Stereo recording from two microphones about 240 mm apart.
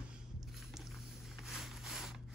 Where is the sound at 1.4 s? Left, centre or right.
Centre.